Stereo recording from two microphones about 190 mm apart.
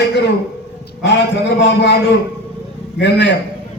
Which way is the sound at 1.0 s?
70° left (ahead or behind).